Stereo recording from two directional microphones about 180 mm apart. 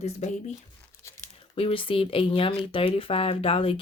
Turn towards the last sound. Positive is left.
turn(degrees=30)  # may be behind; listen again after turning